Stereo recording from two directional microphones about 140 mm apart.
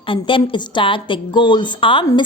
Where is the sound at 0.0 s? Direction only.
40° left (ahead or behind).